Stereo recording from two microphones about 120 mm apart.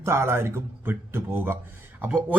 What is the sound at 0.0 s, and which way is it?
Speech, 20° right (ahead or behind).